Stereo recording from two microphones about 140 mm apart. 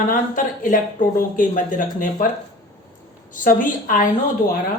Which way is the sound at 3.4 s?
80° left.